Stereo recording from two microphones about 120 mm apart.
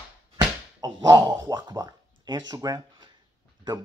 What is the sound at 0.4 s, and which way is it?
Slap, 35° right (ahead or behind).